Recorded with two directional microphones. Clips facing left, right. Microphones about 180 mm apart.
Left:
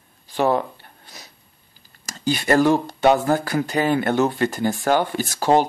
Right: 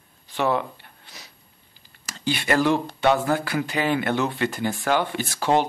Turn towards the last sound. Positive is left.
turn(degrees=40)  # may be behind; listen again after turning